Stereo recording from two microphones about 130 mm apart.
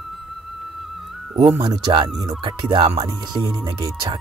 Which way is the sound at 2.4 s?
35° right (ahead or behind).